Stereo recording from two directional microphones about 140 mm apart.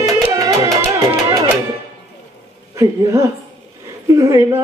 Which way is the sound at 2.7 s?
25° right (ahead or behind).